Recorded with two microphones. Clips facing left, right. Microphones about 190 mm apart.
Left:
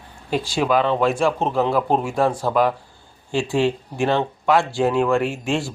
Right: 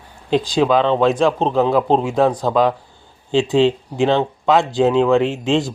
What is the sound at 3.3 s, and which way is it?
A man's voice, 20° right (ahead or behind).